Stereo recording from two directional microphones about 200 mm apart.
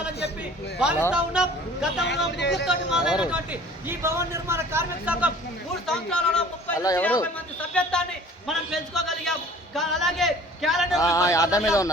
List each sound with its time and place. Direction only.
1.1 s a man's voice: 5° right (ahead or behind)
2.0 s speech: 60° left (ahead or behind)
2.6 s a man's voice: 5° right (ahead or behind)
5.8 s a man's voice: 5° left (ahead or behind)
6.7 s a man's voice: 15° left (ahead or behind); by 11.0 s centre (ahead or behind)
11.0 s a man's voice: 15° left (ahead or behind)